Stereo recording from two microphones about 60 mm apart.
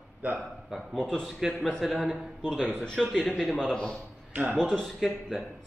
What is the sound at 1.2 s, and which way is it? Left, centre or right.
Speech, centre.